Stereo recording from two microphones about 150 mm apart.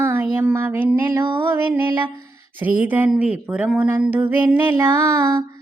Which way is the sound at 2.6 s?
10° right (ahead or behind).